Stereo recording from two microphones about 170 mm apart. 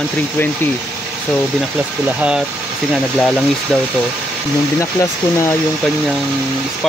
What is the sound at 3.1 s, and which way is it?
Speech, 5° left (ahead or behind).